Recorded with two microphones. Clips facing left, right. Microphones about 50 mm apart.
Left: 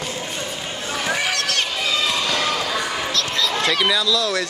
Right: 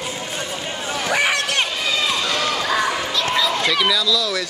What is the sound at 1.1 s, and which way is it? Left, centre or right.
Run, right.